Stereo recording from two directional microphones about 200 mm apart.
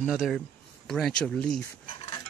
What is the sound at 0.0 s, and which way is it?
Speech, centre (ahead or behind).